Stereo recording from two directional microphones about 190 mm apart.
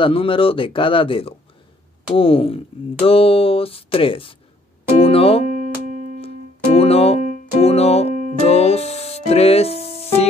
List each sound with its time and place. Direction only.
0.0 s speech: 30° left (ahead or behind)
6.2 s music: 30° left (ahead or behind)